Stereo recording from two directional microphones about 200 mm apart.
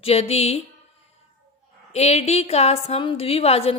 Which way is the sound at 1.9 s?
35° left (ahead or behind).